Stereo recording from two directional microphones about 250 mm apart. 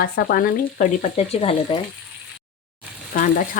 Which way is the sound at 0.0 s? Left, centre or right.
Left.